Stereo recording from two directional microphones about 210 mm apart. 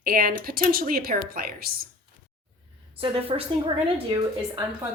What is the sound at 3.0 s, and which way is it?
A woman's voice, 25° right (ahead or behind).